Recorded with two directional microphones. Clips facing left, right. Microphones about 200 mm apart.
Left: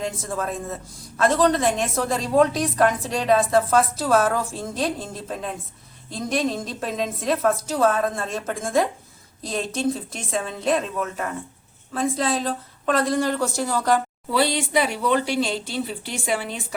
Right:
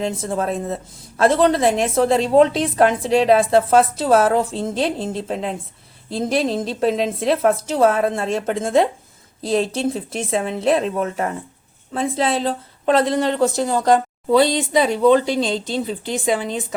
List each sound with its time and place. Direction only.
0.0 s a woman's voice: 30° right (ahead or behind)